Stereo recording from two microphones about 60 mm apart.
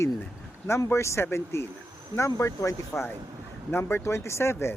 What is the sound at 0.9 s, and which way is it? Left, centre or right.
Speech, left.